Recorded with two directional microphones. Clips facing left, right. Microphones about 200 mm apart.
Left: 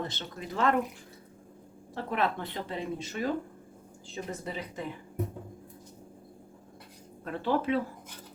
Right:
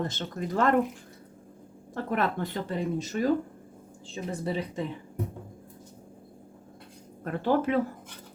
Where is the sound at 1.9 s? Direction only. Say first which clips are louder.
Right 2 dB; 45° right (ahead or behind).